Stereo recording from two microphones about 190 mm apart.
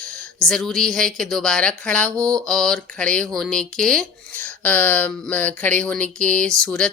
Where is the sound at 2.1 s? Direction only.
20° right (ahead or behind).